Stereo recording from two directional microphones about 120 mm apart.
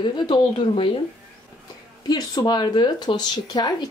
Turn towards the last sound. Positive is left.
turn(degrees=35)  # may be behind; listen again after turning